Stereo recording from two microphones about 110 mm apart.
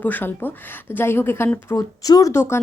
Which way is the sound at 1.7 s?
35° left (ahead or behind).